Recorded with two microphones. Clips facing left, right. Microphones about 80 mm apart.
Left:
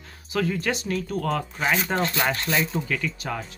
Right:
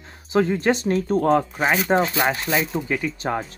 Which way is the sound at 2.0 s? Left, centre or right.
Centre.